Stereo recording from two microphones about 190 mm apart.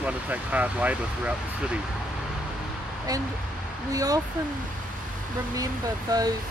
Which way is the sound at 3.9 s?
20° right (ahead or behind).